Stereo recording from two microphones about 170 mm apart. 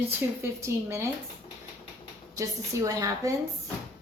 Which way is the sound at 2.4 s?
20° right (ahead or behind).